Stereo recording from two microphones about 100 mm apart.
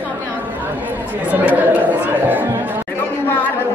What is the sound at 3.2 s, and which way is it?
Speech, 15° left (ahead or behind).